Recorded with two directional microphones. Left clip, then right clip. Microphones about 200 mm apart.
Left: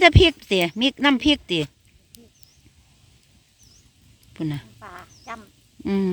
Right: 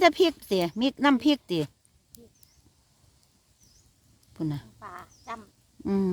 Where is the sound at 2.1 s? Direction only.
5° right (ahead or behind).